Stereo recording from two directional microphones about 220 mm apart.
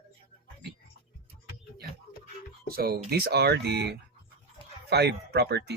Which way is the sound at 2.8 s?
45° right (ahead or behind).